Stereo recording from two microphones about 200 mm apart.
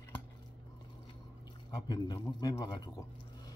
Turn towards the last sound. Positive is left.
turn(degrees=20)  # may be behind; listen again after turning